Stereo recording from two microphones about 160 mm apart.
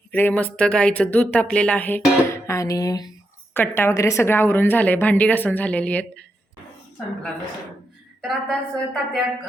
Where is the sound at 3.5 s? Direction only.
15° left (ahead or behind).